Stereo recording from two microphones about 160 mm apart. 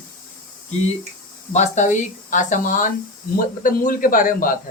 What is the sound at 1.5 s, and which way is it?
Speech, 45° left (ahead or behind).